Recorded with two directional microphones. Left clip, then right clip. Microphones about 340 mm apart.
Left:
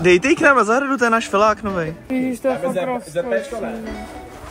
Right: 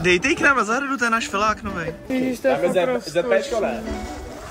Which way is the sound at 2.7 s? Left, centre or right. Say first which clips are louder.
Right 2 dB; right.